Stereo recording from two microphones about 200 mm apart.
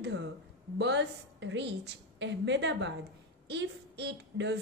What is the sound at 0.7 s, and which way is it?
A woman's voice, 60° right (ahead or behind).